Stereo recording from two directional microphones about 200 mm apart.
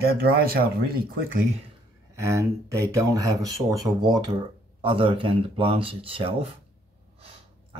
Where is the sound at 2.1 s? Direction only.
15° right (ahead or behind).